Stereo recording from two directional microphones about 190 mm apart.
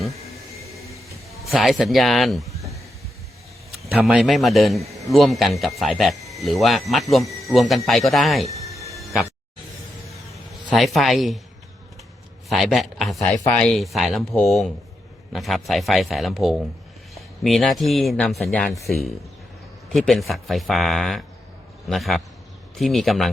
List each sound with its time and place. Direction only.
1.3 s speech: centre (ahead or behind)
3.9 s speech: centre (ahead or behind)
8.4 s music: 15° right (ahead or behind)
8.9 s music: centre (ahead or behind)
10.7 s speech: centre (ahead or behind)
12.5 s speech: centre (ahead or behind)